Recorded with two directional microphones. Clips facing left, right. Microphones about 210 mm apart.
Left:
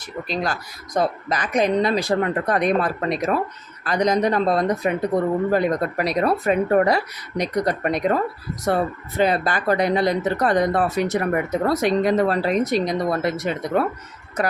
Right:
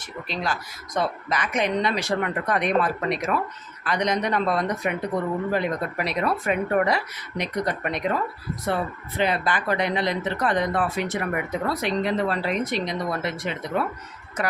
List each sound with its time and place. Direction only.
0.0 s speech: 40° left (ahead or behind)